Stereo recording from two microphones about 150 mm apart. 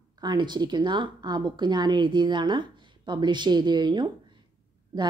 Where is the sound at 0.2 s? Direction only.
30° right (ahead or behind).